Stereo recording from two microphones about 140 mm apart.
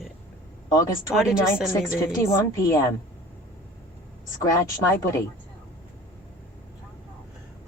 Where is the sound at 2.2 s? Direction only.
20° left (ahead or behind).